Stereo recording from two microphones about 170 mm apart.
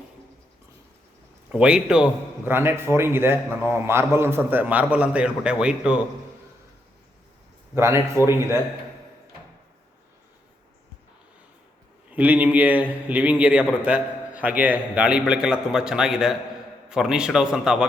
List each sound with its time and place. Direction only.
1.5 s a man's voice: 5° right (ahead or behind)
7.8 s a man's voice: 15° right (ahead or behind)
12.1 s a man's voice: 10° right (ahead or behind)